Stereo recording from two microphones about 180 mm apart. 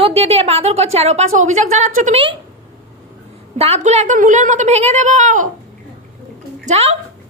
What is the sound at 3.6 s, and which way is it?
A woman's voice, 35° right (ahead or behind).